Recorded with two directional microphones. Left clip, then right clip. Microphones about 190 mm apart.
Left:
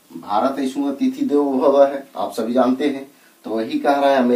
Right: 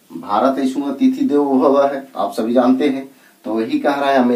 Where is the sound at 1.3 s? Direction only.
20° left (ahead or behind).